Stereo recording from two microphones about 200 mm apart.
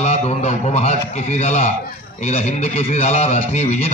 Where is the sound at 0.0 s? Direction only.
35° left (ahead or behind).